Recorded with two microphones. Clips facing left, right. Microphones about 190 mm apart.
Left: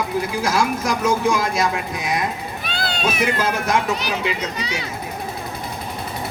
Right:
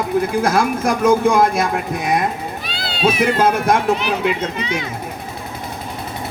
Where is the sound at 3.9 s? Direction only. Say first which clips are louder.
Right 5 dB; 40° left (ahead or behind).